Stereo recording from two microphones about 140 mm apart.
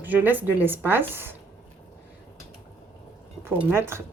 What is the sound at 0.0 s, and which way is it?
Speech, 15° right (ahead or behind).